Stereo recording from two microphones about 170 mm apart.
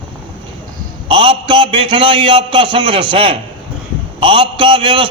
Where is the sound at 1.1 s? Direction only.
30° right (ahead or behind).